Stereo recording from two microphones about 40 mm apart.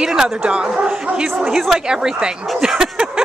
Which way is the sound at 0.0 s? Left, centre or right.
Centre.